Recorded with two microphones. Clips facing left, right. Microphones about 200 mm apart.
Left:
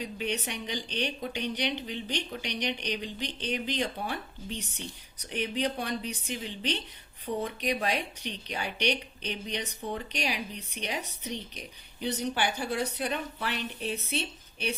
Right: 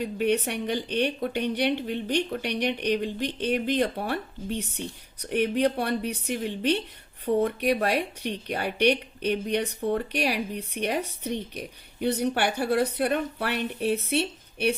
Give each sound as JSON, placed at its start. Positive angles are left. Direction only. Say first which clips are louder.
{"t": 0.0, "sound": "speech", "louder": "right 8 dB", "side_deg": -55}